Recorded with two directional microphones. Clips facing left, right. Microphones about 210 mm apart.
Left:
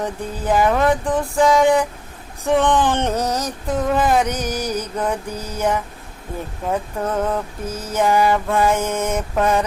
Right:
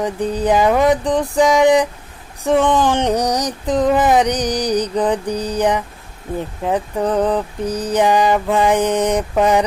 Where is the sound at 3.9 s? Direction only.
20° right (ahead or behind).